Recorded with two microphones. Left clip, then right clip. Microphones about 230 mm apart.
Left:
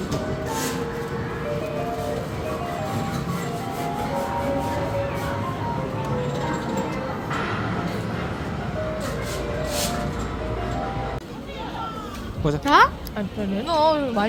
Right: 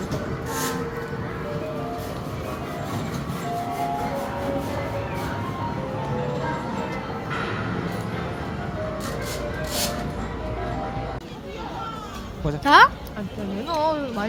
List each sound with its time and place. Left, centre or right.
12.6 s speech: right
13.7 s speech: left